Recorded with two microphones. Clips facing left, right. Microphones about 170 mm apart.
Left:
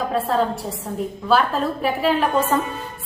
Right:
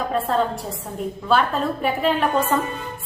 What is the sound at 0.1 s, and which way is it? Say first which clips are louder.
A woman's voice: even; centre (ahead or behind).